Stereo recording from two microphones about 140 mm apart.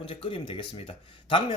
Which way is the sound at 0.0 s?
40° left (ahead or behind).